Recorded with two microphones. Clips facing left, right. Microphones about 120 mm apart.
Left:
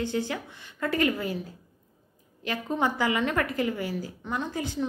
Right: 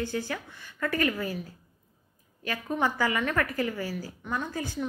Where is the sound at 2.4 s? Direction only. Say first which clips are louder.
Left 1 dB; 20° left (ahead or behind).